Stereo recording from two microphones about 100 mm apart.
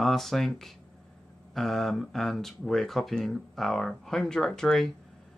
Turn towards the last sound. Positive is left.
turn(degrees=5)  # may be behind; listen again after turning